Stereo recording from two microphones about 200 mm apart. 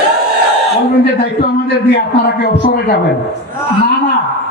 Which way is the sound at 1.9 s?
55° left (ahead or behind).